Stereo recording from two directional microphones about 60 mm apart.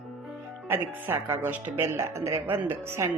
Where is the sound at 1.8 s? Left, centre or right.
Right.